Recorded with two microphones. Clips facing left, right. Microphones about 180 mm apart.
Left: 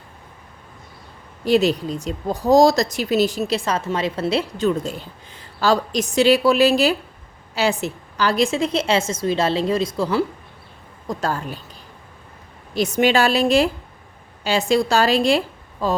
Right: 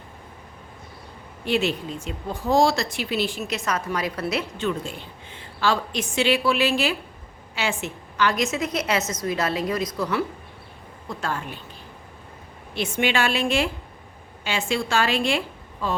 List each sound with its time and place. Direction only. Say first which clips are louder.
1.5 s a woman's voice: left 7 dB; 40° left (ahead or behind)
12.7 s a woman's voice: left 6 dB; 40° left (ahead or behind)